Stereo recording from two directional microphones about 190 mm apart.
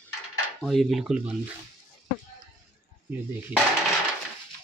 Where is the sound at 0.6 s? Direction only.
Centre (ahead or behind).